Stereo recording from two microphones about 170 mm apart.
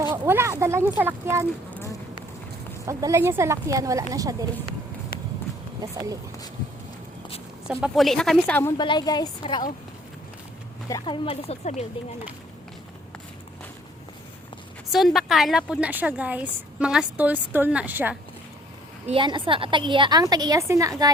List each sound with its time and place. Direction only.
0.1 s speech: 15° right (ahead or behind)
2.8 s a woman's voice: 15° right (ahead or behind)
5.1 s clip-clop: 60° left (ahead or behind)
5.8 s a woman's voice: 20° right (ahead or behind)
7.7 s speech: centre (ahead or behind)
8.8 s a woman's voice: 25° left (ahead or behind)
10.8 s speech: 25° left (ahead or behind); by 11.9 s 40° left (ahead or behind)
14.9 s a woman's voice: centre (ahead or behind)
19.0 s a woman's voice: 30° right (ahead or behind)